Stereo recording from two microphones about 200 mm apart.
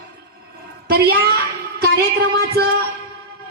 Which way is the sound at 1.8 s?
55° right (ahead or behind).